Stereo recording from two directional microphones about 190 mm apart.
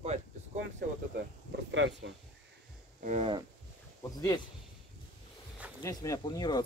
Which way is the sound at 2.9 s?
40° right (ahead or behind).